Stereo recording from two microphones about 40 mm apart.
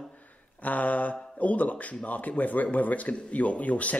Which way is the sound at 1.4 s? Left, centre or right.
Left.